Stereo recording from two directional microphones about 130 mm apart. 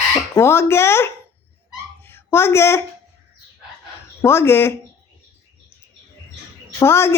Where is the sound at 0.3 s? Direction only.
20° left (ahead or behind).